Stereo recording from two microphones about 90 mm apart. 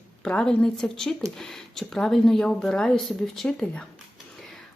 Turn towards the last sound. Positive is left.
turn(degrees=5)  # may be behind; listen again after turning